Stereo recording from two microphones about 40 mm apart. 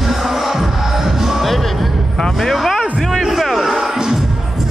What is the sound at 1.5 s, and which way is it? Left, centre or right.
Music, centre.